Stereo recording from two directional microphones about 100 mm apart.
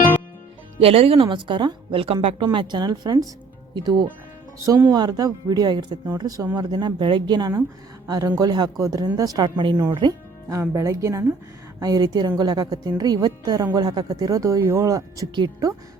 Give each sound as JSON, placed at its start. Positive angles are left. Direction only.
{"t": 0.8, "sound": "a woman's voice", "side_deg": -80}
{"t": 4.9, "sound": "a woman's voice", "side_deg": -40}
{"t": 9.9, "sound": "speech", "side_deg": -50}
{"t": 10.5, "sound": "speech", "side_deg": -30}